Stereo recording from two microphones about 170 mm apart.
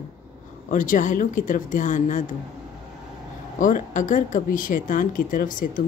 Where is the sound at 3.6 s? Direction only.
50° left (ahead or behind).